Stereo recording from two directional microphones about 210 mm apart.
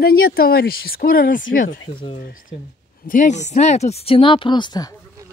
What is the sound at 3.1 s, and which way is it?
Speech, 35° left (ahead or behind).